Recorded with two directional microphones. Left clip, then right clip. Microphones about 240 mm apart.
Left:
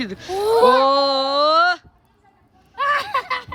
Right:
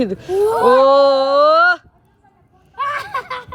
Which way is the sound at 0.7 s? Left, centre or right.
Centre.